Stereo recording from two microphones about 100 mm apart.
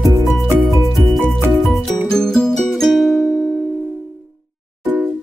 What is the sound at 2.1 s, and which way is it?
Music, 5° left (ahead or behind).